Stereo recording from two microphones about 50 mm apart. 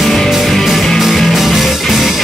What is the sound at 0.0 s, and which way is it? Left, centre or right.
Music, centre.